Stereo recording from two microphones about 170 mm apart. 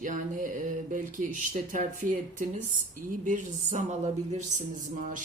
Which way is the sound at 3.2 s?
50° right (ahead or behind).